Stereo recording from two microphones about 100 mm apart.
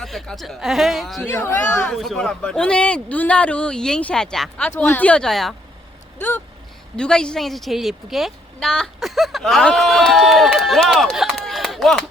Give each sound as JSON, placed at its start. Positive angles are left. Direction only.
{"t": 0.0, "sound": "a woman's voice", "side_deg": 5}
{"t": 6.1, "sound": "a woman's voice", "side_deg": 15}